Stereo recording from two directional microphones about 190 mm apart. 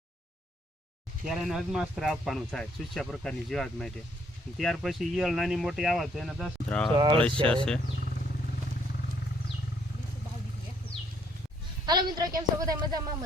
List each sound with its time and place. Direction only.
1.2 s speech: centre (ahead or behind)
6.9 s speech: 25° right (ahead or behind)
7.5 s speech: 5° left (ahead or behind)
11.9 s a woman's voice: 20° right (ahead or behind)